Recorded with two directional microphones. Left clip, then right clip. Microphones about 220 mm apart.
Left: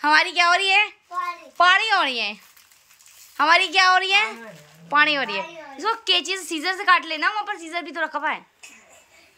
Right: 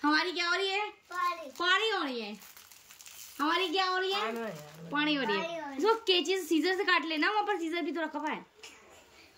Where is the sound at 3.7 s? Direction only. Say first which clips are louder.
Left 13 dB; 30° left (ahead or behind).